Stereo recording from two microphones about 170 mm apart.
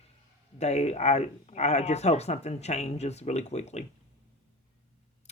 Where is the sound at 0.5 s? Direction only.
40° left (ahead or behind).